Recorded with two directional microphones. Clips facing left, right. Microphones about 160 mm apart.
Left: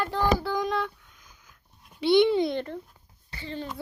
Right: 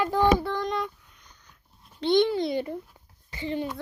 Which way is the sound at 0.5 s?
5° left (ahead or behind).